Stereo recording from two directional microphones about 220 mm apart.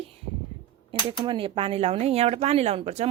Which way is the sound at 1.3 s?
25° right (ahead or behind).